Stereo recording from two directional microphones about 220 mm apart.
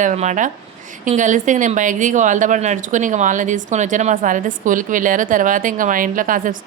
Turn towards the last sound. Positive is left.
turn(degrees=-40)  # may be behind; listen again after turning